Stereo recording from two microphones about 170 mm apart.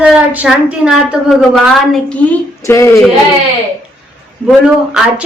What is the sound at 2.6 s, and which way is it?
Speech, 15° left (ahead or behind).